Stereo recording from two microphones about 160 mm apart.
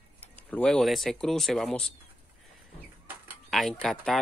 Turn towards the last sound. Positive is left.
turn(degrees=0)  # may be behind; listen again after turning